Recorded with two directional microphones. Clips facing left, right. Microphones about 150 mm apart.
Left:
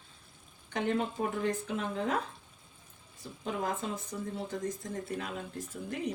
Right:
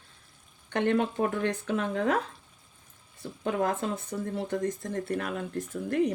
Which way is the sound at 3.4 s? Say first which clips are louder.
Right 6 dB; 65° right (ahead or behind).